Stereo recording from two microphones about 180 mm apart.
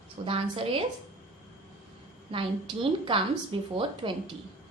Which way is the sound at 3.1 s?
25° right (ahead or behind).